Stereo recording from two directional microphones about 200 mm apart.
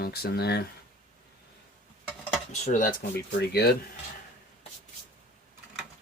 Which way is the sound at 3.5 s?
50° left (ahead or behind).